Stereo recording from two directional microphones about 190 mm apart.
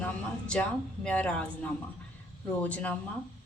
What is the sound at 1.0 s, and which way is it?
Speech, 5° left (ahead or behind).